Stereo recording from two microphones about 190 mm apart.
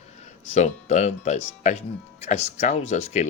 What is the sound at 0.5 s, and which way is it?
Speech, 40° left (ahead or behind).